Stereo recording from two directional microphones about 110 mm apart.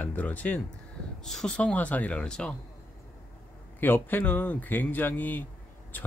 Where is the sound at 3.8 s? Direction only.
15° left (ahead or behind).